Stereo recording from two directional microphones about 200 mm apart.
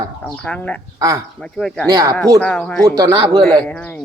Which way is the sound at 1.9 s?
20° right (ahead or behind).